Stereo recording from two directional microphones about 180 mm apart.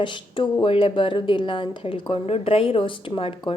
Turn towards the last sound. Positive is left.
turn(degrees=30)  # may be behind; listen again after turning